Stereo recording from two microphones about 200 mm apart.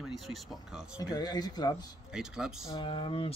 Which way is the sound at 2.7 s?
25° left (ahead or behind).